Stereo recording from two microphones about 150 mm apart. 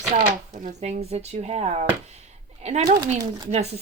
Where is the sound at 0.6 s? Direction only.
50° right (ahead or behind).